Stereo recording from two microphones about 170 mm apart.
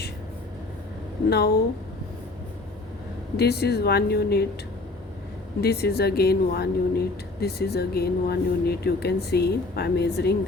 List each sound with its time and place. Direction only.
3.3 s speech: 70° left (ahead or behind)
5.5 s speech: 70° left (ahead or behind)